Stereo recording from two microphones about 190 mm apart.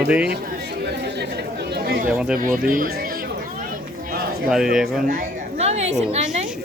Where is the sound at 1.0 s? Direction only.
60° right (ahead or behind).